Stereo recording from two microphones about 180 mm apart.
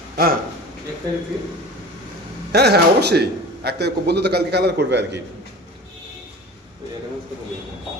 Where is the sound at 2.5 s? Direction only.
65° right (ahead or behind).